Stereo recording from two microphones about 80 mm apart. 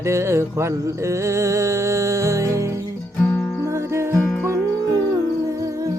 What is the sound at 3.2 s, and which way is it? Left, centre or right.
Music, centre.